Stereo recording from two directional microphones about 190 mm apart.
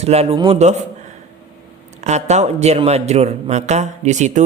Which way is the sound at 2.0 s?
35° right (ahead or behind).